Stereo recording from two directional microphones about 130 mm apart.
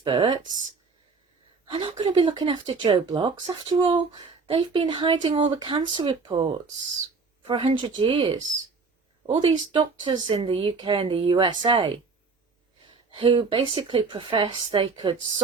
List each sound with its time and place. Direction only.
0.0 s speech: 40° right (ahead or behind)
1.7 s speech: 40° right (ahead or behind)
13.1 s speech: 40° right (ahead or behind)